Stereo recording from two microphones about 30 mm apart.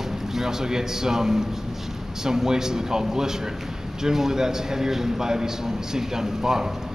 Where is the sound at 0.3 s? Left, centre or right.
Centre.